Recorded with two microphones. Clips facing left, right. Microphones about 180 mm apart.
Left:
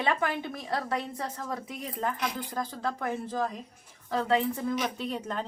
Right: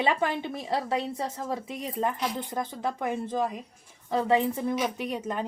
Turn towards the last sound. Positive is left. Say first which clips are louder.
# right 2 dB
turn(degrees=-15)  # may be behind; listen again after turning